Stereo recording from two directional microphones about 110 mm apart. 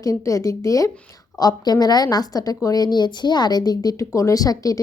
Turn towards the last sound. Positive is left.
turn(degrees=35)  # may be behind; listen again after turning